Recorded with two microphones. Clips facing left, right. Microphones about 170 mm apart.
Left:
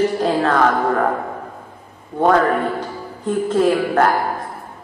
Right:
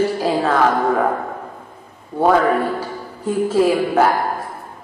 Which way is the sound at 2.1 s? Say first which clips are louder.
Even; 5° right (ahead or behind).